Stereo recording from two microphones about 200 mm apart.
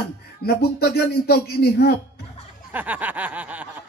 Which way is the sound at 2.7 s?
10° right (ahead or behind).